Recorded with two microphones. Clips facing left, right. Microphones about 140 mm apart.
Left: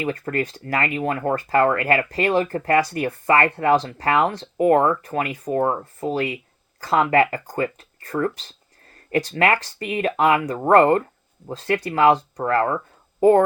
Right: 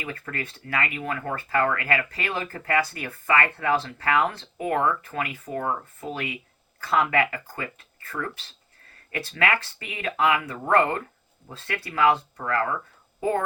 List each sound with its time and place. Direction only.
0.0 s speech: 35° left (ahead or behind)